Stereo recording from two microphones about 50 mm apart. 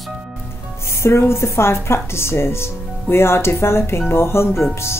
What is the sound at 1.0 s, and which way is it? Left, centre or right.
Speech, left.